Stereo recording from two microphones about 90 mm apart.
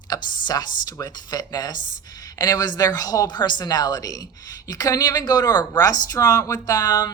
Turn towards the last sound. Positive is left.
turn(degrees=45)  # may be behind; listen again after turning